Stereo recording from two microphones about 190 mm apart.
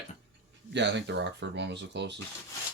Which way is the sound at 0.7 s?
65° right (ahead or behind).